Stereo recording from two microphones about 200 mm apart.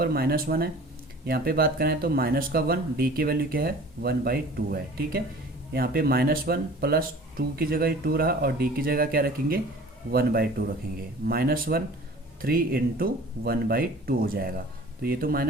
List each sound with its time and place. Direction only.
0.0 s speech: 50° right (ahead or behind)